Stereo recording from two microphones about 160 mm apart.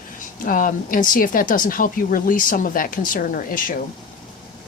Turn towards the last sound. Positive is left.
turn(degrees=60)  # may be behind; listen again after turning